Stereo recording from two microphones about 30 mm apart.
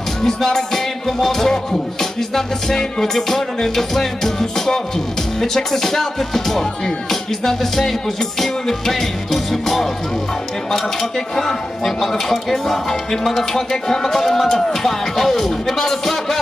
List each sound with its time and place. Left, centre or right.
0.2 s music: centre